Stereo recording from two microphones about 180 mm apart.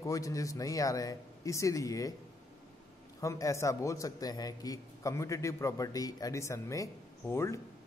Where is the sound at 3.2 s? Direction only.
15° left (ahead or behind).